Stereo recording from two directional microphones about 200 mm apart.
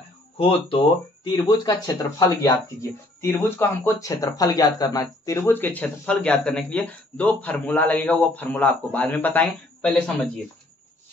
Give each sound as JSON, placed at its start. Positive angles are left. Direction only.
{"t": 0.4, "sound": "speech", "side_deg": 25}